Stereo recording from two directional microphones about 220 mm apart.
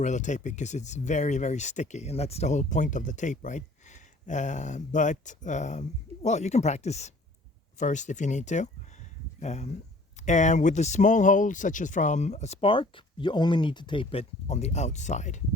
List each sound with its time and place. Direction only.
0.0 s speech: 35° left (ahead or behind)